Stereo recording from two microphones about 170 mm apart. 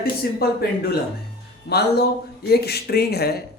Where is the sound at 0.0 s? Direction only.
65° left (ahead or behind).